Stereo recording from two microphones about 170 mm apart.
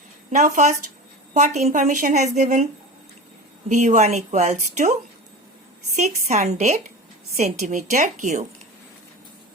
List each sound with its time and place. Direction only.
0.3 s a woman's voice: 45° right (ahead or behind)
3.7 s a woman's voice: 45° right (ahead or behind)
6.0 s a woman's voice: 45° right (ahead or behind)